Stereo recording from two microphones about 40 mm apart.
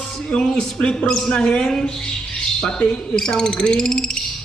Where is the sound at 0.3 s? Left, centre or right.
Left.